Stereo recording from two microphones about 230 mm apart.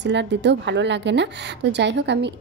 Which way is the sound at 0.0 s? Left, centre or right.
Right.